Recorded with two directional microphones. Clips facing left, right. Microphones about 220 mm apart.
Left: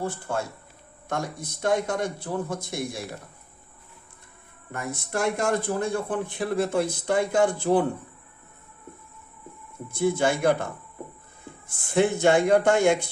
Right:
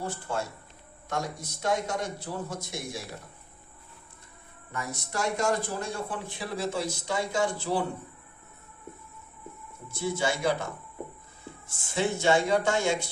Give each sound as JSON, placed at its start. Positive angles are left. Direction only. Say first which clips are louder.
{"t": 0.0, "sound": "a man's voice", "louder": "left 3 dB", "side_deg": 55}
{"t": 4.7, "sound": "a man's voice", "louder": "left 5 dB", "side_deg": 55}
{"t": 9.9, "sound": "a man's voice", "louder": "left 6 dB", "side_deg": 55}
{"t": 11.9, "sound": "a man's voice", "louder": "left 5 dB", "side_deg": 55}